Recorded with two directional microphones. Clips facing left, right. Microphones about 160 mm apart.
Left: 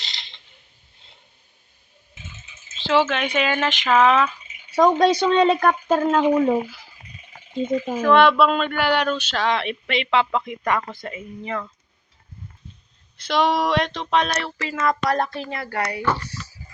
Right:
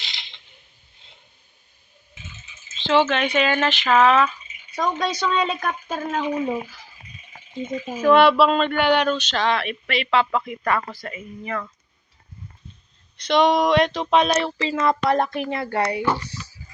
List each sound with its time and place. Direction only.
2.7 s speech: 5° left (ahead or behind)
4.9 s speech: 30° left (ahead or behind)
5.3 s a woman's voice: 55° left (ahead or behind)
8.0 s speech: 10° right (ahead or behind)
8.4 s speech: 5° left (ahead or behind)
9.6 s speech: 20° left (ahead or behind)
13.1 s speech: centre (ahead or behind)